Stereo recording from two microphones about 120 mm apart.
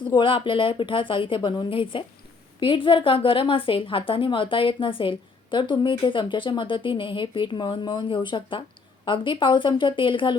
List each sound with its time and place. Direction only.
0.1 s a woman's voice: 45° left (ahead or behind)